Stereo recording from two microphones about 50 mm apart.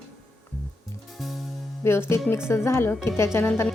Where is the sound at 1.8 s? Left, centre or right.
Left.